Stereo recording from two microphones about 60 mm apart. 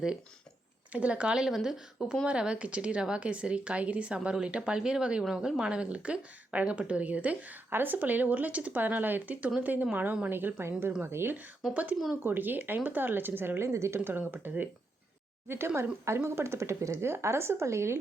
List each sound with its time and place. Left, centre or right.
0.9 s speech: right; by 1.8 s centre
2.2 s a woman's voice: centre; by 11.3 s right
11.7 s a woman's voice: right
14.0 s a woman's voice: right
15.4 s speech: right